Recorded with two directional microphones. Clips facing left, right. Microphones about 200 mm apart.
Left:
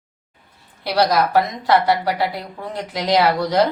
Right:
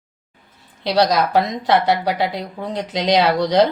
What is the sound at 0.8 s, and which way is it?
A woman's voice, 20° right (ahead or behind).